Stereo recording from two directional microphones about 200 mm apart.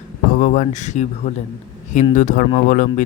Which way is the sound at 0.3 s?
40° left (ahead or behind).